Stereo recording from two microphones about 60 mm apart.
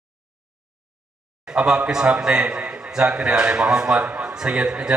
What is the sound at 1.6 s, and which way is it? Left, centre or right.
A man's voice, centre.